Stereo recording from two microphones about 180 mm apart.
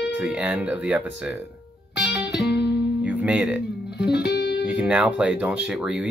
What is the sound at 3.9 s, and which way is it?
Music, 65° left (ahead or behind).